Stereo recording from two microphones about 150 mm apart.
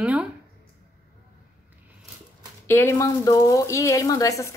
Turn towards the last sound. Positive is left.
turn(degrees=20)  # may be behind; listen again after turning